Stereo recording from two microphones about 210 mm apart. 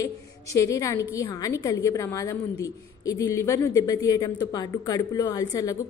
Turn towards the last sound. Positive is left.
turn(degrees=15)  # may be behind; listen again after turning